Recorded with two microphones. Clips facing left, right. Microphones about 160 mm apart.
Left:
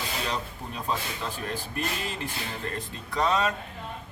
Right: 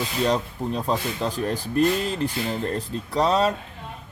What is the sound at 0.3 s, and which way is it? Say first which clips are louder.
Speech: right 9 dB; 35° right (ahead or behind).